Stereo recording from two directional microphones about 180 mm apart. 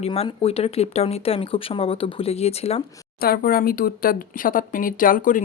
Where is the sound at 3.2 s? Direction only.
55° left (ahead or behind).